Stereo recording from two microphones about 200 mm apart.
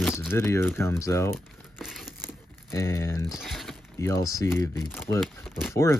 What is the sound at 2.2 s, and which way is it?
Crumpling, 10° left (ahead or behind).